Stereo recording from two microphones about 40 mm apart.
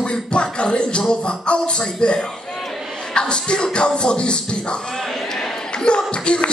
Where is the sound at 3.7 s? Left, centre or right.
Left.